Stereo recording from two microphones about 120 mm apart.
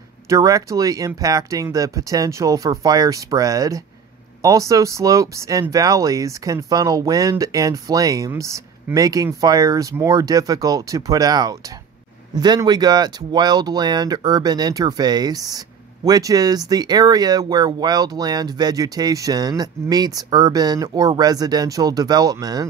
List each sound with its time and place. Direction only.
0.3 s speech: 30° right (ahead or behind)